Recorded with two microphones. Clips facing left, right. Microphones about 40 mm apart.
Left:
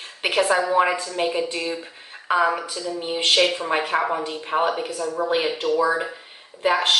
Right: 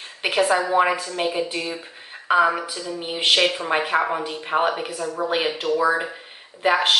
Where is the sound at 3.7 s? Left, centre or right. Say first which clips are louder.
Right 1 dB; centre.